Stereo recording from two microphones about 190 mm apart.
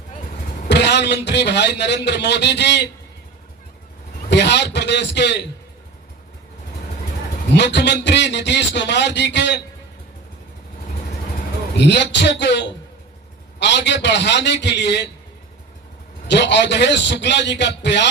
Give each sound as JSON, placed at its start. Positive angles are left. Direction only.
{"t": 0.7, "sound": "a man's voice", "side_deg": 65}
{"t": 4.3, "sound": "a man's voice", "side_deg": 65}
{"t": 7.5, "sound": "a man's voice", "side_deg": 65}
{"t": 11.8, "sound": "a man's voice", "side_deg": 65}
{"t": 16.3, "sound": "a man's voice", "side_deg": 65}